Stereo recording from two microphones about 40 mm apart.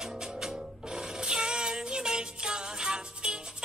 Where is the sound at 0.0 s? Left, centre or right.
Centre.